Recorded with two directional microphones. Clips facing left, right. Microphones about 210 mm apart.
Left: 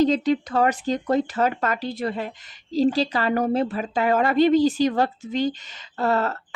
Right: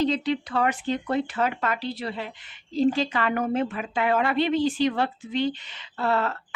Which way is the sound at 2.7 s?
35° left (ahead or behind).